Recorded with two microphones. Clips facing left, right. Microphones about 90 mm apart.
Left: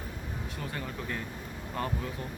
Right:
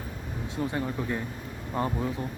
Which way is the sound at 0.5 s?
20° right (ahead or behind).